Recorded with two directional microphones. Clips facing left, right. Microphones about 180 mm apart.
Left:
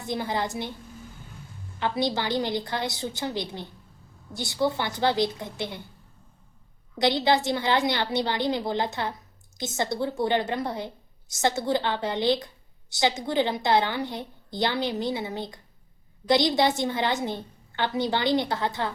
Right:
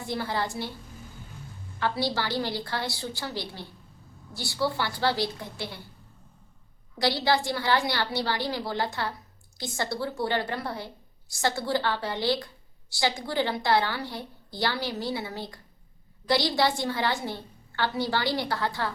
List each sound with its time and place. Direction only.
0.1 s a woman's voice: 20° left (ahead or behind)
1.8 s a woman's voice: 20° left (ahead or behind)
7.0 s a woman's voice: 20° left (ahead or behind)